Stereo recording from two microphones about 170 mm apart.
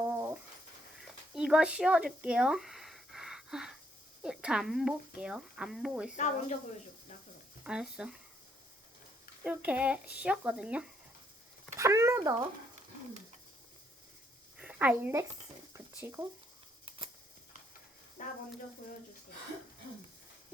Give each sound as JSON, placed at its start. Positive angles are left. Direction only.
{"t": 0.0, "sound": "a sound", "side_deg": -15}
{"t": 0.9, "sound": "a sound", "side_deg": -5}
{"t": 4.2, "sound": "speech", "side_deg": -5}
{"t": 6.1, "sound": "speech", "side_deg": 45}
{"t": 7.6, "sound": "speech", "side_deg": -5}
{"t": 9.4, "sound": "speech", "side_deg": -10}
{"t": 11.8, "sound": "a sound", "side_deg": -15}
{"t": 14.6, "sound": "a woman's voice", "side_deg": -10}
{"t": 15.7, "sound": "mechanisms", "side_deg": -15}
{"t": 18.2, "sound": "speech", "side_deg": 50}